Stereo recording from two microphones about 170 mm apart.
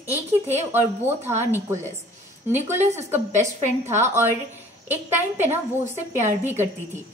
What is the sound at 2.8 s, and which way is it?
Speech, 40° right (ahead or behind).